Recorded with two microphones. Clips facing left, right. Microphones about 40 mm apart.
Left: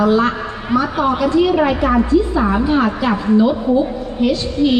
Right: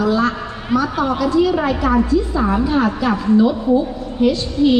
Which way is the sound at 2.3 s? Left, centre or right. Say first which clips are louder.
Left 2 dB; left.